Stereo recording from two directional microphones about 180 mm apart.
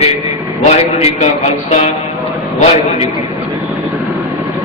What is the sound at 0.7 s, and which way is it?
A man's voice, 35° left (ahead or behind).